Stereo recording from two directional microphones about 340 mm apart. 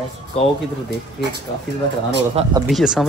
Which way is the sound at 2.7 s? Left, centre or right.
Centre.